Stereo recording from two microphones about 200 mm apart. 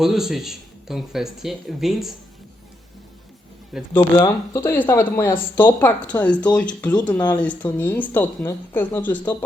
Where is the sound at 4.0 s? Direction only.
20° left (ahead or behind).